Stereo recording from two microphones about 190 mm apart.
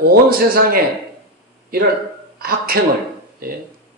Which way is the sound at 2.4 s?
50° right (ahead or behind).